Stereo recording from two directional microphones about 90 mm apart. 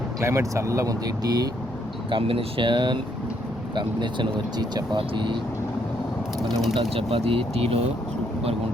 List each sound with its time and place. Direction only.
0.2 s speech: 35° right (ahead or behind)
2.0 s speech: 80° right; by 5.4 s 65° right (ahead or behind)
6.5 s speech: 5° left (ahead or behind)
6.7 s speech: 90° right